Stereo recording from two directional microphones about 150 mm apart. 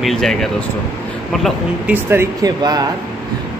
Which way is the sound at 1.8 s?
15° right (ahead or behind).